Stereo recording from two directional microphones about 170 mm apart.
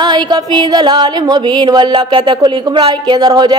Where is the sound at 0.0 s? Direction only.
25° right (ahead or behind).